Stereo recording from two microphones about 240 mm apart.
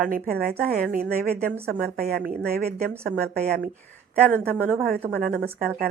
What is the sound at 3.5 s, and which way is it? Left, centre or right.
Speech, right.